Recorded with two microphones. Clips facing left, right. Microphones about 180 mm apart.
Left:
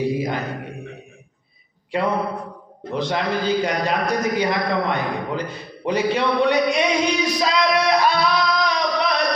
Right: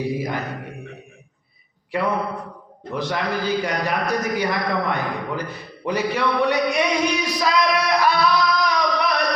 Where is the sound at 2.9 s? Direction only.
20° left (ahead or behind).